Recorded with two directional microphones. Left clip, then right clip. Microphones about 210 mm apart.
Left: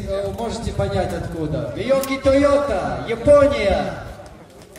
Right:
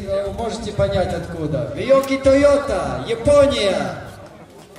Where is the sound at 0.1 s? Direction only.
25° right (ahead or behind); by 3.7 s 50° right (ahead or behind).